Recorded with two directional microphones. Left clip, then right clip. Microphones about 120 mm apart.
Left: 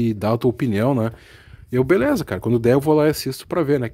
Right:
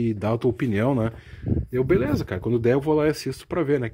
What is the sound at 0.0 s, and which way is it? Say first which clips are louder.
Speech: left 4 dB; 30° left (ahead or behind).